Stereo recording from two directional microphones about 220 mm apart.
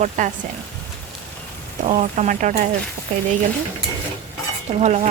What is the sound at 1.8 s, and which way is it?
Speech, 35° right (ahead or behind).